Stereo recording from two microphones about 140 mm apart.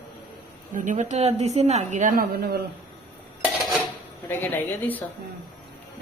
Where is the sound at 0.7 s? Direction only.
70° right (ahead or behind); by 2.5 s 90° right.